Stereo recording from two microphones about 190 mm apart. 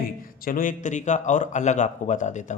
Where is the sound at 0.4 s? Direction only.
45° left (ahead or behind).